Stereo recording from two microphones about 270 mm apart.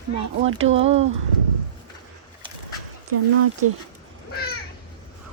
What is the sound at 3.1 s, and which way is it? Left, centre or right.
Speech, right.